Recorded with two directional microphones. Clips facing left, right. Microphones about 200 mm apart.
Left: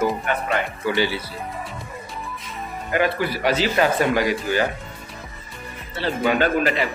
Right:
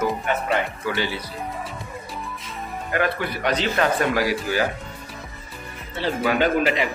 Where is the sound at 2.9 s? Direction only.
5° left (ahead or behind).